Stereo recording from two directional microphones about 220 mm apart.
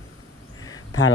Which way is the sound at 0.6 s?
15° left (ahead or behind).